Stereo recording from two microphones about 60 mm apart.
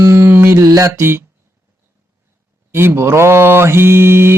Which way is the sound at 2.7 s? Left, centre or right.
Right.